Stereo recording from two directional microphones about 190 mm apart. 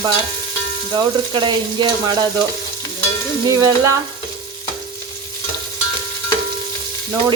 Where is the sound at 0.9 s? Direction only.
25° right (ahead or behind).